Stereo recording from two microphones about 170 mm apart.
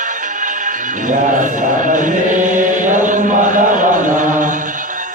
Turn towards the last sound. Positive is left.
turn(degrees=-50)  # may be behind; listen again after turning